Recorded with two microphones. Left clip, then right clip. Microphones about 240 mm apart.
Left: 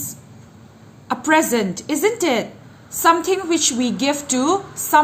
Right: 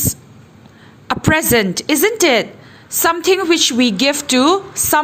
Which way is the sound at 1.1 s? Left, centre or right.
Right.